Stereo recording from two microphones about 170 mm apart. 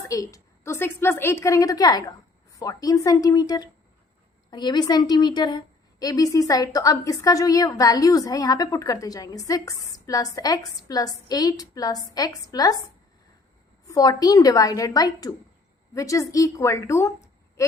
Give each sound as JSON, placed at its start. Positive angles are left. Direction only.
{"t": 0.1, "sound": "a woman's voice", "side_deg": 20}
{"t": 13.8, "sound": "a woman's voice", "side_deg": 20}
{"t": 17.6, "sound": "a sound", "side_deg": 15}